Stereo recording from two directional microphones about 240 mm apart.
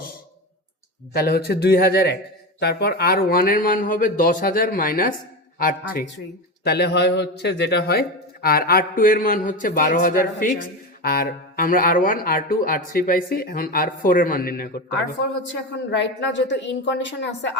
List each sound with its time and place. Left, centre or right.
1.1 s a man's voice: left
15.9 s a woman's voice: left